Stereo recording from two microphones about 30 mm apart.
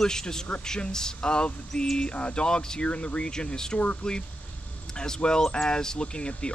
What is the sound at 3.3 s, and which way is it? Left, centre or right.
Speech, left.